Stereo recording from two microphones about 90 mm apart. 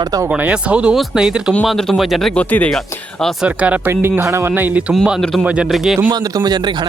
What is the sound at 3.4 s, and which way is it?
Speech, 15° right (ahead or behind).